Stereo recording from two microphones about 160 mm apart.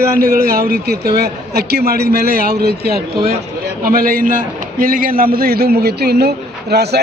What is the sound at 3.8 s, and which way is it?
A man's voice, 65° right (ahead or behind).